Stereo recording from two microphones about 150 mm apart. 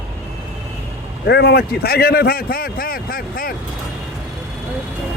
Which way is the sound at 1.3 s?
90° left.